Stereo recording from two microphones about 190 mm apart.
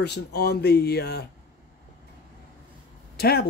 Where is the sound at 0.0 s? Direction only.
60° left (ahead or behind).